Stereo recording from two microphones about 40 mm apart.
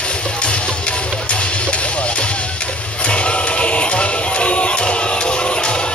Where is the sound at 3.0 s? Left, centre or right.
Left.